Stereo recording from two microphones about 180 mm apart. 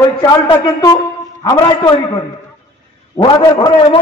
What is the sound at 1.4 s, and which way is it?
Speech, 20° left (ahead or behind).